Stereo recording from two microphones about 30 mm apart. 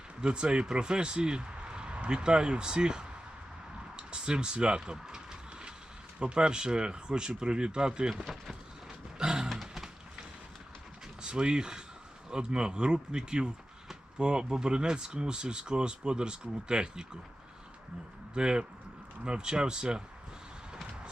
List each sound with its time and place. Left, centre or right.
0.2 s speech: right
5.0 s vehicle: centre
6.1 s speech: right
9.1 s a sound: right
11.2 s speech: right
18.3 s speech: right